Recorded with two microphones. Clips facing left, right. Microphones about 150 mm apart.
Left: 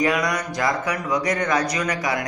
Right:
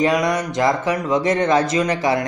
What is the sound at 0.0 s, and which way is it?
A man's voice, 25° right (ahead or behind).